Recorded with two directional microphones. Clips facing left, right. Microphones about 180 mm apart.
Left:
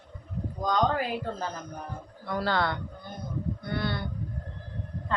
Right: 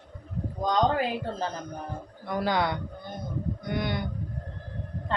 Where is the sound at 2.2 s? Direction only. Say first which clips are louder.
Right 1 dB; 15° right (ahead or behind).